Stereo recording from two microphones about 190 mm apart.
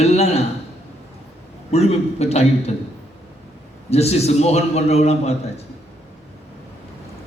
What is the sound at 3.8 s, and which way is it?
A man's voice, 35° left (ahead or behind).